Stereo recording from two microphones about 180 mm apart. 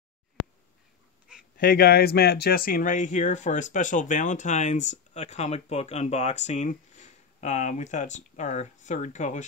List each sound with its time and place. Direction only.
1.6 s speech: 55° left (ahead or behind)